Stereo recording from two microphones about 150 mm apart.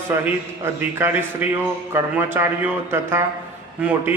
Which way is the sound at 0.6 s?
15° right (ahead or behind).